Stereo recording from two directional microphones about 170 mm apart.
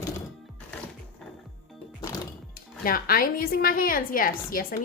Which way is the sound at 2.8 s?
60° left (ahead or behind).